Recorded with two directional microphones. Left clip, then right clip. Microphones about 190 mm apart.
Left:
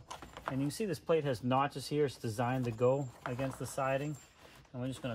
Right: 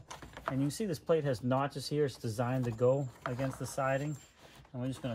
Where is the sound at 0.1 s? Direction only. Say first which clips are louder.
Right 2 dB; centre (ahead or behind).